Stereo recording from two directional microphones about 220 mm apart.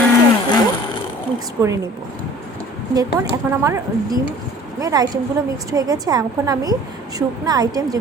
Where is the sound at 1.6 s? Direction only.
15° right (ahead or behind).